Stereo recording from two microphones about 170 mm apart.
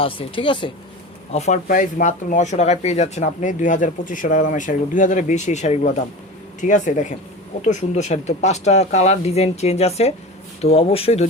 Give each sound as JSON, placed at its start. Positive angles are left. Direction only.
{"t": 0.0, "sound": "speech", "side_deg": 30}
{"t": 1.3, "sound": "speech", "side_deg": 40}
{"t": 1.6, "sound": "speech", "side_deg": 50}